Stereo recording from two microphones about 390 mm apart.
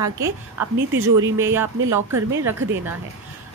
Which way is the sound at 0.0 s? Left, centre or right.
Centre.